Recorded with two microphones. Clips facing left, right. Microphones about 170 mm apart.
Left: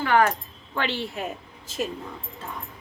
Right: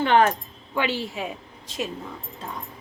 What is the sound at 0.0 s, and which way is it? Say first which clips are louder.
Speech: right 2 dB; 25° right (ahead or behind).